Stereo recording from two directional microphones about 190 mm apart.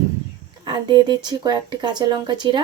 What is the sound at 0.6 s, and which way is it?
Speech, 25° right (ahead or behind).